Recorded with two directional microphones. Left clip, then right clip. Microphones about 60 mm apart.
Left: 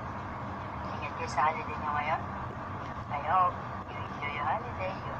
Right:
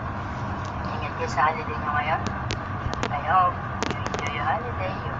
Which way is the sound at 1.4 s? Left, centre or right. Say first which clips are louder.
Right 5 dB; centre.